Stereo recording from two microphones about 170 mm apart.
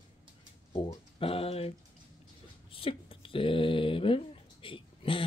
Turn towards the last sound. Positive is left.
turn(degrees=30)  # may be behind; listen again after turning